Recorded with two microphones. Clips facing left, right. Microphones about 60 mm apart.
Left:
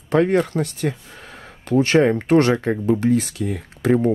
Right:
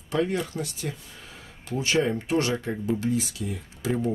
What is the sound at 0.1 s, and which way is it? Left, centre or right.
Speech, left.